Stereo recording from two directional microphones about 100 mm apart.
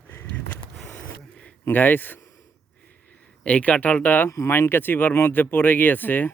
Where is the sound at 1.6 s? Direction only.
20° left (ahead or behind).